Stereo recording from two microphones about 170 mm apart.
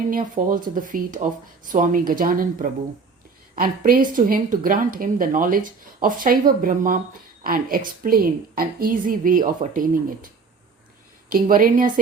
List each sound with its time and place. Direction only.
0.1 s a woman's voice: 50° right (ahead or behind)
11.3 s a woman's voice: 55° right (ahead or behind)